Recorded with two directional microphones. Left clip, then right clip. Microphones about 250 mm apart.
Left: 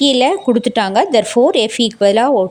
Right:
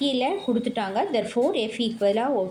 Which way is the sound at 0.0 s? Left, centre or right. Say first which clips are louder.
Left 12 dB; left.